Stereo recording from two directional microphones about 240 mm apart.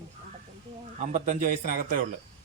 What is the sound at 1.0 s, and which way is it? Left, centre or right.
A man's voice, right.